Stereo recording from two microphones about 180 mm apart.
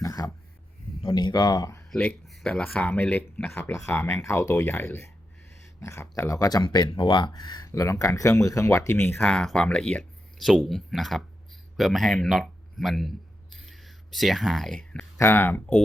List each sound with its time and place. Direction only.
0.0 s speech: 20° left (ahead or behind)
1.9 s speech: 5° left (ahead or behind)